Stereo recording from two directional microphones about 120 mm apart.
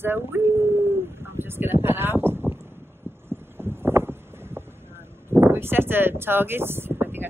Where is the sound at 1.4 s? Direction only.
20° right (ahead or behind).